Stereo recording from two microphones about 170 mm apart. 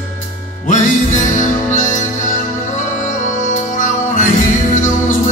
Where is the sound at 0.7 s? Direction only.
45° left (ahead or behind).